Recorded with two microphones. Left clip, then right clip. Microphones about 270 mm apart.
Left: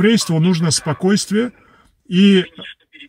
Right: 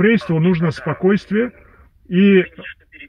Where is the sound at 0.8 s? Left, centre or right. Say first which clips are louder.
Right 1 dB; left.